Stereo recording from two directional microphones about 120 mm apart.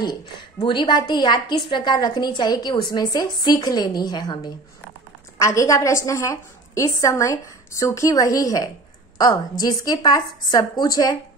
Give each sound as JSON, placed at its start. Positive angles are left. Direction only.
{"t": 0.6, "sound": "a woman's voice", "side_deg": 40}
{"t": 5.4, "sound": "a woman's voice", "side_deg": 25}